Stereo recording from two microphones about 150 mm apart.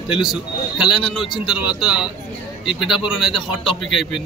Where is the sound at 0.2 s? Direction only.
Centre (ahead or behind).